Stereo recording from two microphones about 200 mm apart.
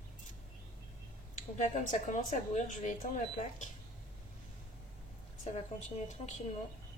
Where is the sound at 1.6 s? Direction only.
40° left (ahead or behind).